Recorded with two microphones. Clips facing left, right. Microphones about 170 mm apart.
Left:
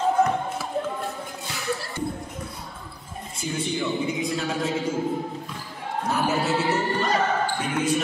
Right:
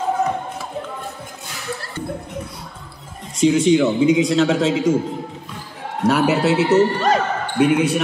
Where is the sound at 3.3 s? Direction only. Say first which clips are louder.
Right 14 dB; 90° right.